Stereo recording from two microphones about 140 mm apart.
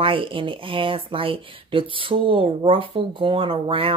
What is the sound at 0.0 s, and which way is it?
Speech, 40° right (ahead or behind).